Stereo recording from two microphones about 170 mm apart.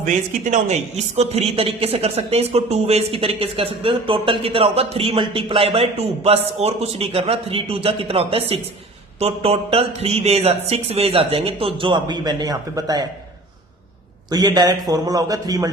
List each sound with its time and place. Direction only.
0.0 s a man's voice: 45° right (ahead or behind); by 13.1 s 20° right (ahead or behind)
14.3 s a man's voice: 25° right (ahead or behind)